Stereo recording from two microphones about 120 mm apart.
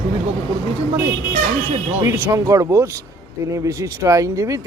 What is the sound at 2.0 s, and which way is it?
Speech, 25° right (ahead or behind).